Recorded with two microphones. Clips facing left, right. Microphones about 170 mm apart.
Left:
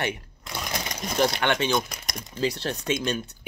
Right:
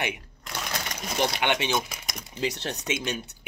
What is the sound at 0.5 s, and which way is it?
Sewing machine, 15° left (ahead or behind).